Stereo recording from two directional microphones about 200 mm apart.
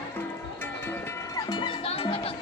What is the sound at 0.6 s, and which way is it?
Music, 10° left (ahead or behind).